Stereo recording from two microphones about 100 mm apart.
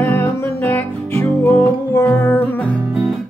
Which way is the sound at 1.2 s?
25° left (ahead or behind).